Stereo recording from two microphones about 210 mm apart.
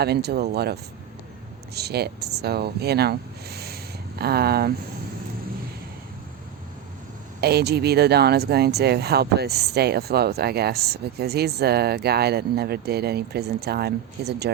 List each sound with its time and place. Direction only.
0.0 s speech: 50° right (ahead or behind)
7.4 s speech: 50° right (ahead or behind)